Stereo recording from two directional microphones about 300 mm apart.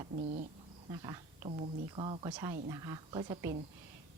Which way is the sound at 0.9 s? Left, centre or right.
Centre.